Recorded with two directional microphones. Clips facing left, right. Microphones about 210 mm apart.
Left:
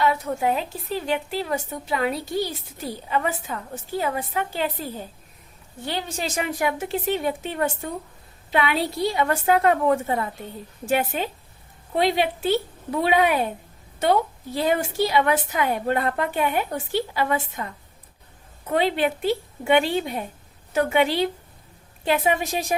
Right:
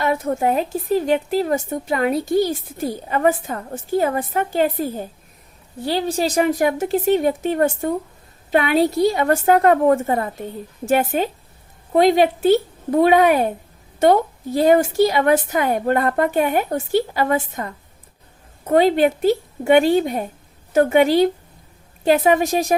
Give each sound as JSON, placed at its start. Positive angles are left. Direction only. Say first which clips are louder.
{"t": 0.0, "sound": "a woman's voice", "louder": "right 3 dB", "side_deg": -50}
{"t": 5.8, "sound": "a woman's voice", "louder": "right 8 dB", "side_deg": -35}
{"t": 18.7, "sound": "a woman's voice", "louder": "right 7 dB", "side_deg": -45}